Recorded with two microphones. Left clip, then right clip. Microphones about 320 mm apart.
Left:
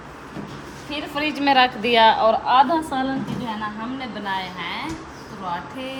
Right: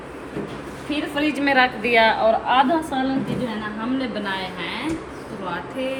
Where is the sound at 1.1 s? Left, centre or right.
Left.